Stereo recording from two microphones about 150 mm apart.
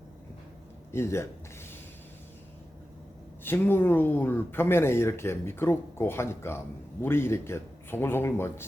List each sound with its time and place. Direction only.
0.9 s speech: 15° left (ahead or behind)
3.4 s speech: 15° left (ahead or behind)